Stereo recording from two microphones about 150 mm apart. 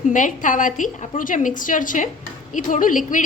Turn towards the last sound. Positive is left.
turn(degrees=60)  # may be behind; listen again after turning